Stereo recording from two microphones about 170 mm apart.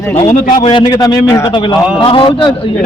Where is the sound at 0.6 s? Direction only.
30° left (ahead or behind).